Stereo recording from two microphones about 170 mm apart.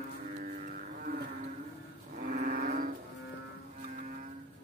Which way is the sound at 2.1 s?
65° right (ahead or behind).